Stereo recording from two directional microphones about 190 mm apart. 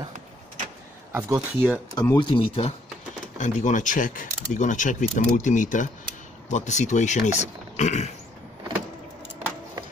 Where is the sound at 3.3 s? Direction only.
40° left (ahead or behind).